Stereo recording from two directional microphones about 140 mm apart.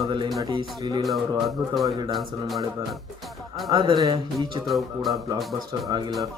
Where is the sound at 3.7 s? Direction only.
35° right (ahead or behind).